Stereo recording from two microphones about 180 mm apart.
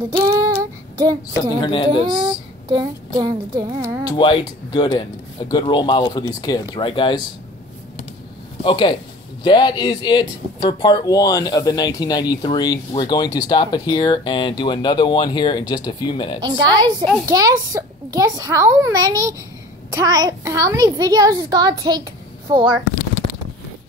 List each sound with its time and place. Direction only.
0.2 s child singing: 15° right (ahead or behind)
0.9 s a child's voice: 20° right (ahead or behind)
1.6 s speech: 25° left (ahead or behind)
2.0 s a child's voice: 25° right (ahead or behind)
4.0 s speech: 30° left (ahead or behind)
8.6 s speech: 25° left (ahead or behind)
16.4 s a child's voice: 25° right (ahead or behind)